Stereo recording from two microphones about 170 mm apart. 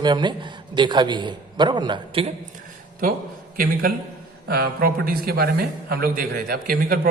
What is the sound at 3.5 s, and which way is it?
A man's voice, 55° right (ahead or behind).